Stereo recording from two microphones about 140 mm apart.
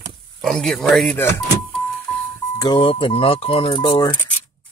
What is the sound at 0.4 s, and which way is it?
Speech, 5° left (ahead or behind).